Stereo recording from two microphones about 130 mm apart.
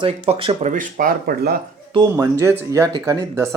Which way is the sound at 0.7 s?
90° right.